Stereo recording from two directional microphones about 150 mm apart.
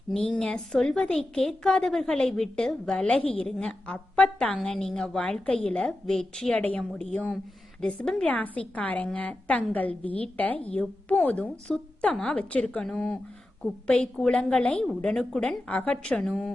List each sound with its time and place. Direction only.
0.1 s a woman's voice: 5° left (ahead or behind)